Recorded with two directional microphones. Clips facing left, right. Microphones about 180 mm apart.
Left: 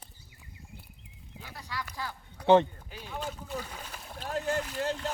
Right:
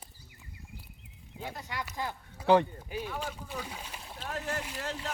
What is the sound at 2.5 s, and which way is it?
Speech, 25° left (ahead or behind).